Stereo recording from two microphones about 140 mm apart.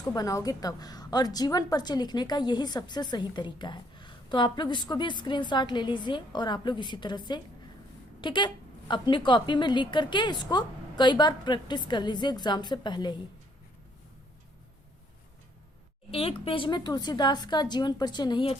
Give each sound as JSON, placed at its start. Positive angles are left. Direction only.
{"t": 0.1, "sound": "a woman's voice", "side_deg": 25}
{"t": 16.1, "sound": "a woman's voice", "side_deg": 40}